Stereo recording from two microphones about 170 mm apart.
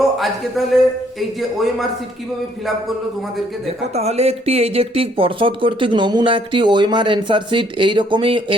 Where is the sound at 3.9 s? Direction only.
40° right (ahead or behind).